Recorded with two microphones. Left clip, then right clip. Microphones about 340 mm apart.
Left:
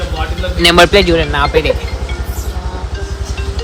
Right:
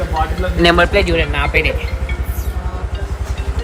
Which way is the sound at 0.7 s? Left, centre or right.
Centre.